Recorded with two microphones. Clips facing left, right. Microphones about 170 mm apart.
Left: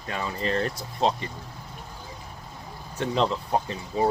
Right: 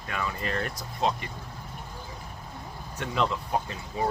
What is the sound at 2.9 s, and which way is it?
Speech, 30° left (ahead or behind).